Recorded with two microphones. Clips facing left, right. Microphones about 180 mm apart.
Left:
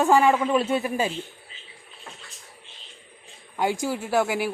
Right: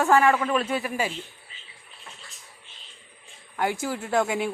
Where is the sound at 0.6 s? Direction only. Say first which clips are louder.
Left 3 dB; 25° left (ahead or behind).